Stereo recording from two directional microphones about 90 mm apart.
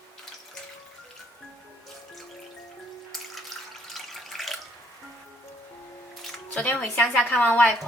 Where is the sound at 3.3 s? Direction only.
Centre (ahead or behind).